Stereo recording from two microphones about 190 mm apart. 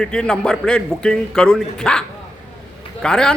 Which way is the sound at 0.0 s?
5° left (ahead or behind).